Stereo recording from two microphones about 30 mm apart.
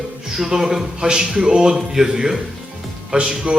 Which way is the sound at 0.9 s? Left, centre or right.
Right.